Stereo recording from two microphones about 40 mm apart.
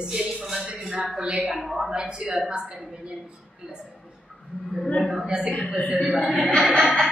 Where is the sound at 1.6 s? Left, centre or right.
Centre.